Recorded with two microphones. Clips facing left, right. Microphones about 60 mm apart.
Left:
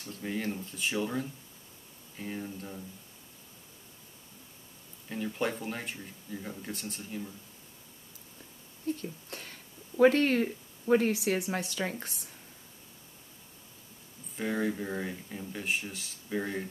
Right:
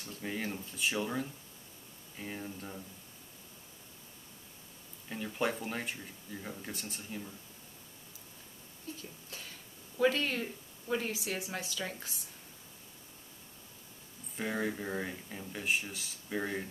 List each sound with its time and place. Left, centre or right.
0.1 s speech: centre
5.1 s speech: centre
8.8 s speech: left
14.3 s speech: centre